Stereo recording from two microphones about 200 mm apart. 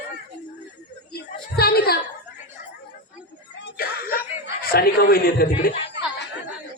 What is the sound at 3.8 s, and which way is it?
Screaming, 50° left (ahead or behind).